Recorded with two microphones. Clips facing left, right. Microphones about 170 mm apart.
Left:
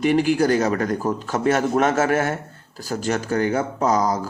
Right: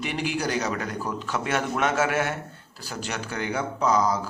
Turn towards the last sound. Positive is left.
turn(degrees=45)  # may be behind; listen again after turning